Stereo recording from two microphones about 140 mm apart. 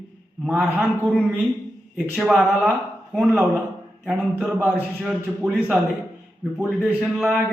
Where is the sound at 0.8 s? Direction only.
10° left (ahead or behind).